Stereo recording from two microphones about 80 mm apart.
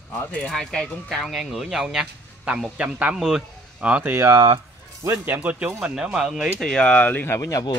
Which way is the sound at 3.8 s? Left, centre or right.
Centre.